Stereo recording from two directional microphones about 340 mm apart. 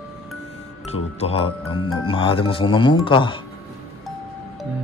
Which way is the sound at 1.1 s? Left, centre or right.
Centre.